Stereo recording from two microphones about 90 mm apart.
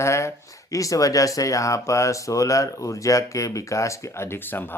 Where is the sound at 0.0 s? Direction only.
30° left (ahead or behind).